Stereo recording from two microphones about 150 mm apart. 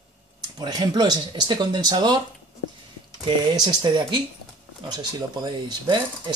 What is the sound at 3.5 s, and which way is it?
Speech, 30° right (ahead or behind).